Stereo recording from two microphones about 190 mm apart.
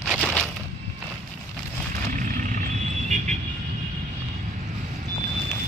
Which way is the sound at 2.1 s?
45° right (ahead or behind).